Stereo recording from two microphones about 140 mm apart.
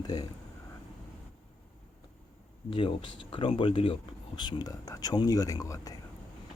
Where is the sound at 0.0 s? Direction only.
30° left (ahead or behind).